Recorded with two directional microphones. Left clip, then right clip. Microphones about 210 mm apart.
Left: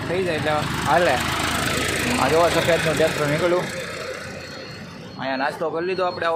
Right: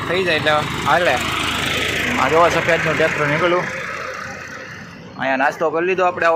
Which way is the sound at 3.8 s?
55° left (ahead or behind).